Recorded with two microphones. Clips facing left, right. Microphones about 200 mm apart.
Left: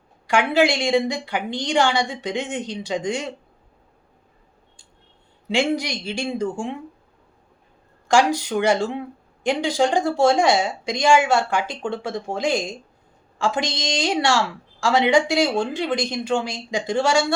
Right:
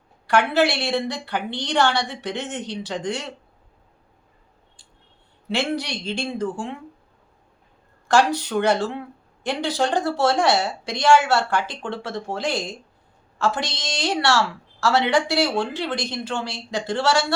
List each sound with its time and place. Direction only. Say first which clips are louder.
0.3 s a woman's voice: left 1 dB; 10° left (ahead or behind)
5.5 s a woman's voice: left 3 dB; 10° left (ahead or behind)
8.0 s a woman's voice: left 1 dB; 10° left (ahead or behind)